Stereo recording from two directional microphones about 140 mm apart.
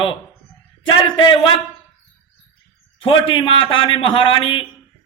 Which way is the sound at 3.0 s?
40° left (ahead or behind).